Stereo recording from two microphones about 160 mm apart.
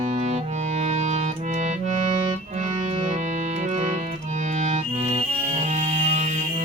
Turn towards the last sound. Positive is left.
turn(degrees=-50)  # may be behind; listen again after turning